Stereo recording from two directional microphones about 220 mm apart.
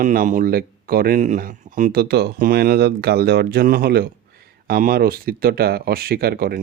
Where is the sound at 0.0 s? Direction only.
40° right (ahead or behind).